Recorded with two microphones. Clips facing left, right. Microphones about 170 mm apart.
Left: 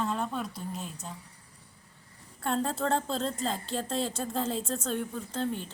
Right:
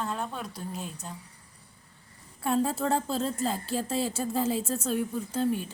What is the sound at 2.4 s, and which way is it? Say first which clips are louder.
A woman's voice: right 3 dB; 5° right (ahead or behind).